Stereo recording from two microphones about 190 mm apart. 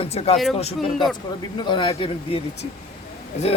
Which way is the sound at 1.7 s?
25° left (ahead or behind).